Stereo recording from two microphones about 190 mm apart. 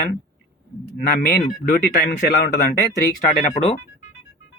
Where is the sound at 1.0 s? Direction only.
55° left (ahead or behind).